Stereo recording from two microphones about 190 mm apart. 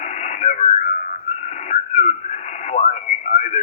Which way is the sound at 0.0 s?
35° left (ahead or behind).